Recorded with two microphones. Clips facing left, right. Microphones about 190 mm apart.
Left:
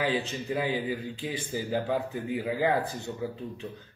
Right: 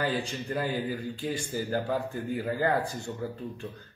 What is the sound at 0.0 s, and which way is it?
A man's voice, 5° left (ahead or behind).